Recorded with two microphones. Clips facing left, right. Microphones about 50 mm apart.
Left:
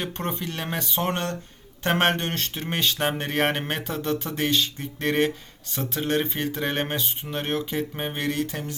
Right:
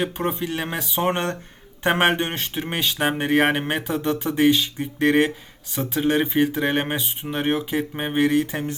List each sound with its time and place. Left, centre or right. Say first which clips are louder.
0.0 s speech: right 5 dB; centre
1.0 s speech: right 4 dB; right